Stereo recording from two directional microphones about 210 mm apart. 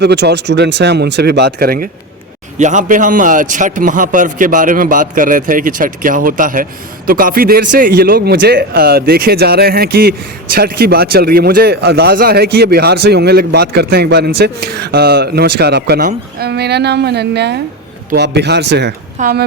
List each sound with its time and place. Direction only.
0.0 s a man's voice: 50° right (ahead or behind)